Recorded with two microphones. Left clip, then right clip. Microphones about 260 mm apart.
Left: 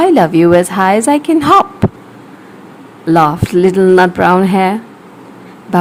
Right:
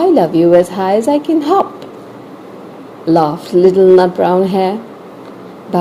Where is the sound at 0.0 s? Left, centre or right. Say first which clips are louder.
Left 2 dB; left.